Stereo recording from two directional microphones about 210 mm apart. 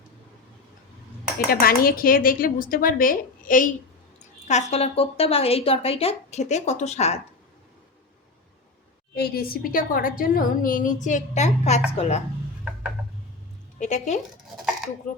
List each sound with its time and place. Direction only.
1.5 s speech: 45° left (ahead or behind)
9.1 s a woman's voice: 50° left (ahead or behind); by 12.2 s 30° left (ahead or behind)
13.7 s speech: 35° left (ahead or behind)